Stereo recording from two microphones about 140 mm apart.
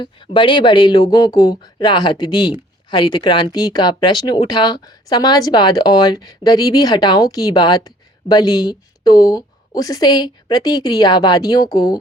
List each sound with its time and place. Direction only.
0.0 s speech: 35° left (ahead or behind)